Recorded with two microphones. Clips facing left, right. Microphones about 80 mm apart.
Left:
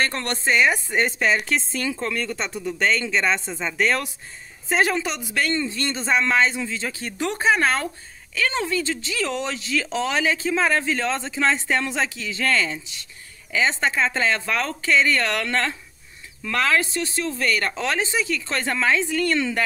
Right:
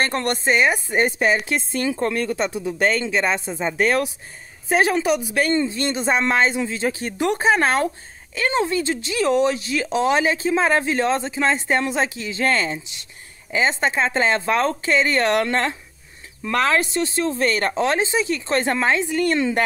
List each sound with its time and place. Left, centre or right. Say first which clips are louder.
0.0 s speech: right 3 dB; right
0.3 s a woman's voice: right 1 dB; centre
1.8 s speech: right 4 dB; right
2.2 s a woman's voice: right 5 dB; centre